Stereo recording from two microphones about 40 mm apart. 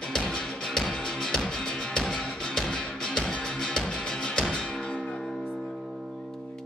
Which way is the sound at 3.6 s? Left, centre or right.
Centre.